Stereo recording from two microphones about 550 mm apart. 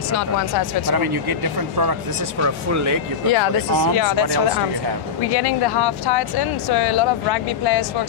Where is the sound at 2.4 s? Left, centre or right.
Right.